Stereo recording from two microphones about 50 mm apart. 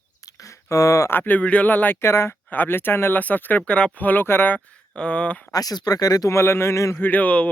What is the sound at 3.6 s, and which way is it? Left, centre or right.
Speech, left.